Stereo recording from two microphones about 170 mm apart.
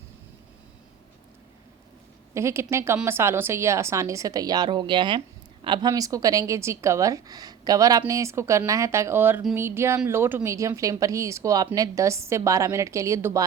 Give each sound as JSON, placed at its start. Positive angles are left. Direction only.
{"t": 2.3, "sound": "a woman's voice", "side_deg": -15}